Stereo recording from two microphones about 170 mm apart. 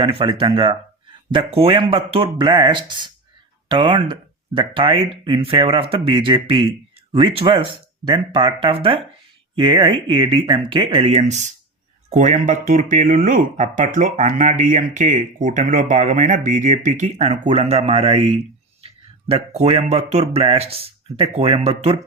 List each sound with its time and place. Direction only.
0.0 s speech: 30° right (ahead or behind)